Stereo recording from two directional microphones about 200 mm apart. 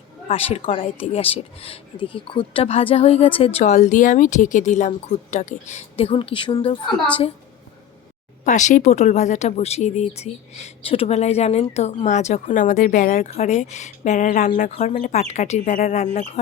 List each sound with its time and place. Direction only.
0.3 s speech: 30° left (ahead or behind)
8.4 s speech: 40° left (ahead or behind)